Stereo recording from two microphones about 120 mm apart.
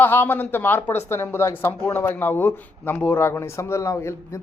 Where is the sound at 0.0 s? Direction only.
15° left (ahead or behind).